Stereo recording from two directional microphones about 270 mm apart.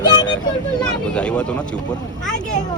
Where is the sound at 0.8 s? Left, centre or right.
Centre.